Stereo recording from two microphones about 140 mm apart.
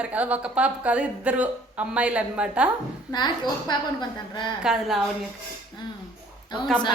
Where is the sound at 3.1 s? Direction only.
30° left (ahead or behind).